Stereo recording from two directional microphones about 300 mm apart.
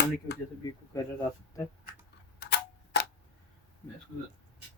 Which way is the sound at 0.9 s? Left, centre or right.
Centre.